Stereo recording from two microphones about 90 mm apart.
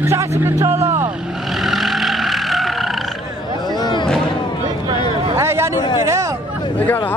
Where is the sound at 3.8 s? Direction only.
55° left (ahead or behind).